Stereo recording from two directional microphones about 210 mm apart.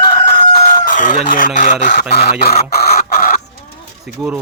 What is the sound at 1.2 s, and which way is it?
Speech, 40° left (ahead or behind).